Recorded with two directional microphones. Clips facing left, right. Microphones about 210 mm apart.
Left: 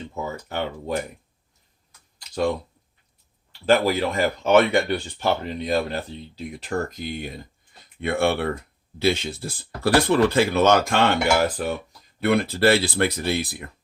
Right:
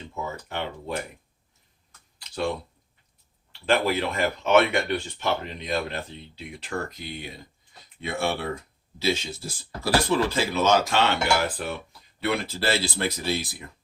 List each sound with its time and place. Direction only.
0.4 s speech: 40° left (ahead or behind)
2.1 s computer keyboard: 40° left (ahead or behind)
3.7 s speech: 40° left (ahead or behind); by 13.7 s 60° left (ahead or behind)